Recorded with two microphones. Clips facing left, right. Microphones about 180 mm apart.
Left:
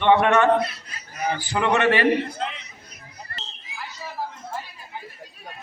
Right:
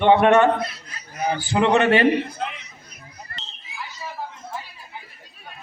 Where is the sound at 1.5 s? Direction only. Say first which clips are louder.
Right 3 dB; 25° right (ahead or behind).